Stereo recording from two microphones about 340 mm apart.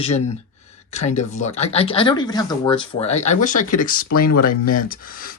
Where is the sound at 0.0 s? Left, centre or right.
Centre.